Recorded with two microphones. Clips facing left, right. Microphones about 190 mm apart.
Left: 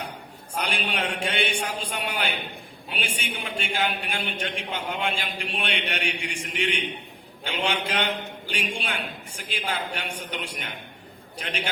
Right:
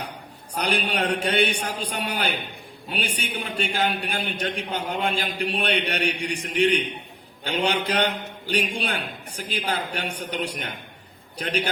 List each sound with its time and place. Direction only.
0.5 s a man's voice: 40° right (ahead or behind)